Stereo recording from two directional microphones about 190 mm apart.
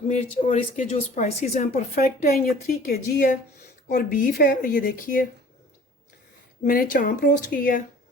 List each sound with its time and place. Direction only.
0.1 s speech: 40° left (ahead or behind)
6.7 s speech: 45° left (ahead or behind)